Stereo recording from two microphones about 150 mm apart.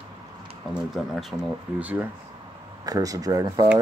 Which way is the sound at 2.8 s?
25° right (ahead or behind).